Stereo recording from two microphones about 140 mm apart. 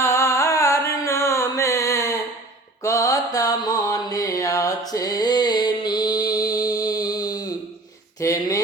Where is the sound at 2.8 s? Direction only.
25° left (ahead or behind).